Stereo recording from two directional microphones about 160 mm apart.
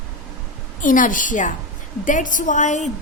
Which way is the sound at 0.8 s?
55° left (ahead or behind).